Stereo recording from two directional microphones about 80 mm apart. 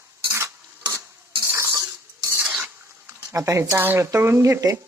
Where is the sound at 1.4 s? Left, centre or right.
Right.